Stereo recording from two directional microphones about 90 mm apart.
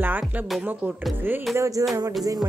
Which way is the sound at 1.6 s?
40° right (ahead or behind).